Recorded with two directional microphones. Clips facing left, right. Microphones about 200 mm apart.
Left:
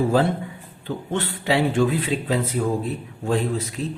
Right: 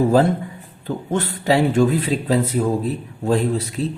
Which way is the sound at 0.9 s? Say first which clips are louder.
Right 3 dB; 40° right (ahead or behind).